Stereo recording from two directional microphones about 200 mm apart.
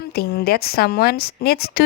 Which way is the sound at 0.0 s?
50° left (ahead or behind).